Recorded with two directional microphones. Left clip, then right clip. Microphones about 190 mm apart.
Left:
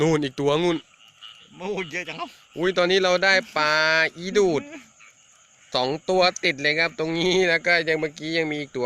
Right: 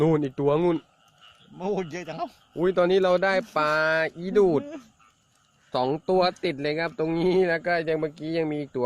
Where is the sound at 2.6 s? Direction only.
10° right (ahead or behind).